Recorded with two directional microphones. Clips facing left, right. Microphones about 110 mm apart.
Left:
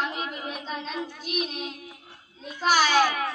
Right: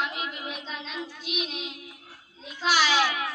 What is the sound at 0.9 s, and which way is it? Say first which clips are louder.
Speech: left 2 dB; 45° left (ahead or behind).